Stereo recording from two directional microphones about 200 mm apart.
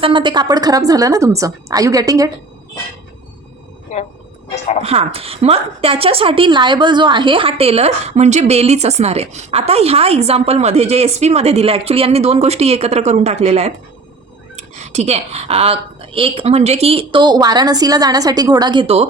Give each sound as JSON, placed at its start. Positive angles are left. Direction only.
{"t": 0.0, "sound": "a woman's voice", "side_deg": -25}
{"t": 4.8, "sound": "a woman's voice", "side_deg": -30}